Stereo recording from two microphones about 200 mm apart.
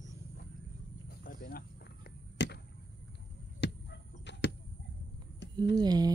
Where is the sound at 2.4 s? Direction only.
60° left (ahead or behind).